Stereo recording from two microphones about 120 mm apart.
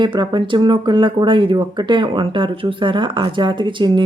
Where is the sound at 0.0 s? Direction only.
40° right (ahead or behind).